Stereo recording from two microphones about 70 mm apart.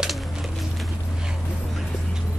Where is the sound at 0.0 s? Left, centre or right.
Centre.